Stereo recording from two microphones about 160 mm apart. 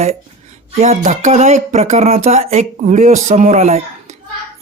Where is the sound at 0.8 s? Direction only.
45° right (ahead or behind).